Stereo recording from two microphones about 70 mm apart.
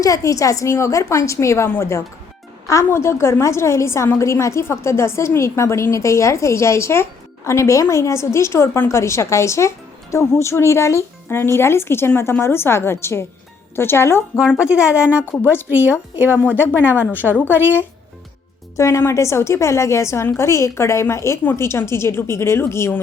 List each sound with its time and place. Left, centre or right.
0.0 s a woman's voice: left
14.6 s a woman's voice: centre
15.3 s speech: left
15.7 s speech: right
16.4 s speech: left
18.8 s a woman's voice: left